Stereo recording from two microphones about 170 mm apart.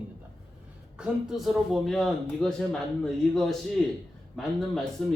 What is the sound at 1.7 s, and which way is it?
Speech, centre (ahead or behind).